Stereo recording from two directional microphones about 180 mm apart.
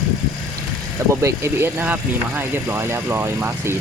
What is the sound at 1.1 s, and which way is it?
Speech, 15° right (ahead or behind).